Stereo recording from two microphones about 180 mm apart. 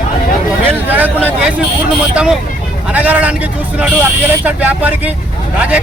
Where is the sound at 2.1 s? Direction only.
5° right (ahead or behind).